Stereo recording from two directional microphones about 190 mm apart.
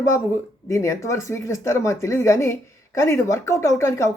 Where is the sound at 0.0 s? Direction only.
15° left (ahead or behind).